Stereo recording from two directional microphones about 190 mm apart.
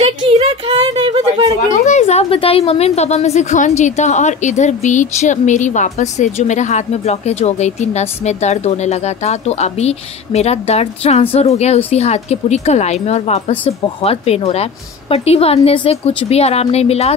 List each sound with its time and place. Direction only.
0.0 s a woman's voice: 30° right (ahead or behind)
1.7 s a woman's voice: 40° left (ahead or behind)